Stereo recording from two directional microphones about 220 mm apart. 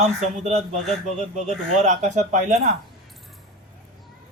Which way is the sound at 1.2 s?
30° right (ahead or behind).